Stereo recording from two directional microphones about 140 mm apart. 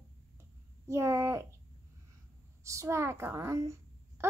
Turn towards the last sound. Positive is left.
turn(degrees=-20)  # may be behind; listen again after turning